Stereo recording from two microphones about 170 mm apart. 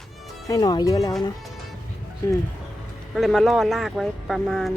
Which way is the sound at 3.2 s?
Centre (ahead or behind).